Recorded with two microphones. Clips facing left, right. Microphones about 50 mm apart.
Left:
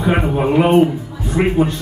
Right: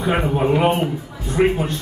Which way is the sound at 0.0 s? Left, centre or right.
Centre.